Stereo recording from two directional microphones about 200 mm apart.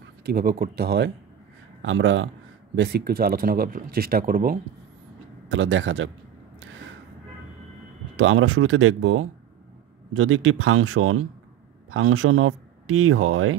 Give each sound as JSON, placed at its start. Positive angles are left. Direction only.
{"t": 0.2, "sound": "speech", "side_deg": -50}
{"t": 1.8, "sound": "speech", "side_deg": -70}
{"t": 5.5, "sound": "speech", "side_deg": -70}
{"t": 8.2, "sound": "speech", "side_deg": -90}